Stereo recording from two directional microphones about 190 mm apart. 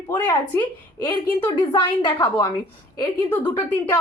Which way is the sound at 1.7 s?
25° left (ahead or behind).